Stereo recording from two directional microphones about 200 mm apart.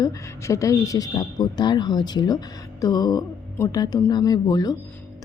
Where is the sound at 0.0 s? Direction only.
15° left (ahead or behind).